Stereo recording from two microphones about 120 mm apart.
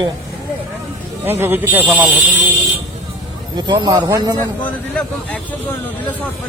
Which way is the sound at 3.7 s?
35° right (ahead or behind).